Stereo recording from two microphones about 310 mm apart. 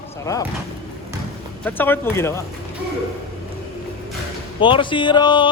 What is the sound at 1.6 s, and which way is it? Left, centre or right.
Speech, centre.